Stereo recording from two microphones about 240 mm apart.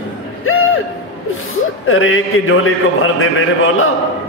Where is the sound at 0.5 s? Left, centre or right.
Left.